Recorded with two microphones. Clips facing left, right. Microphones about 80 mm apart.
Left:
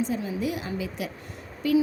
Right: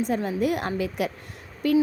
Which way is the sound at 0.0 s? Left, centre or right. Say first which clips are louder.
Right 3 dB; right.